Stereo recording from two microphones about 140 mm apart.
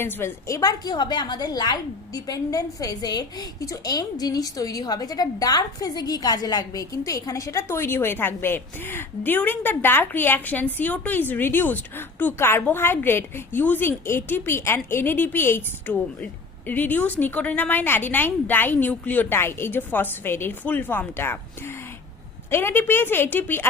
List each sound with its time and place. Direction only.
0.0 s a woman's voice: 15° left (ahead or behind)